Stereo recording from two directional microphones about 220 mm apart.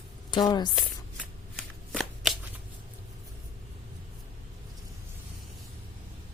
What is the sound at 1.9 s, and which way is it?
Shuffling cards, centre (ahead or behind).